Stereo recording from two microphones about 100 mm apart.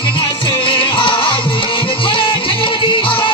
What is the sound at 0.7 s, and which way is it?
Music, 60° left (ahead or behind).